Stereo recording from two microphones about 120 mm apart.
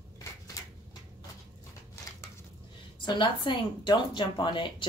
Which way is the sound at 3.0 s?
40° left (ahead or behind).